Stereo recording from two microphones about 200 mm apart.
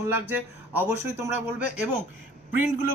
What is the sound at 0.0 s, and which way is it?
Speech, 10° right (ahead or behind).